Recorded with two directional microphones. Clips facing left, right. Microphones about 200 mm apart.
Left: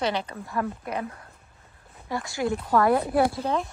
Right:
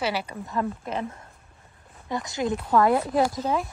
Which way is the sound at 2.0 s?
20° right (ahead or behind).